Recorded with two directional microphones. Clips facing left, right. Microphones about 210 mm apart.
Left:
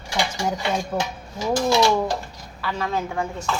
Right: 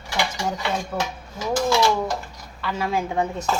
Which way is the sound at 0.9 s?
15° left (ahead or behind).